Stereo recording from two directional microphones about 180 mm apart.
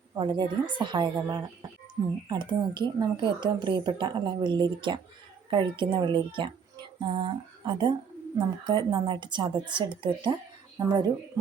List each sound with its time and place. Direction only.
0.2 s a woman's voice: 25° right (ahead or behind)